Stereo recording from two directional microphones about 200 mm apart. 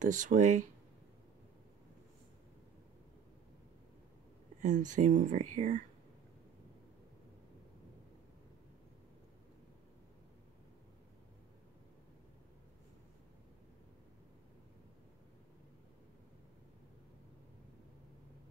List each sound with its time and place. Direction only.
0.0 s speech: 40° right (ahead or behind)
4.6 s speech: 40° right (ahead or behind)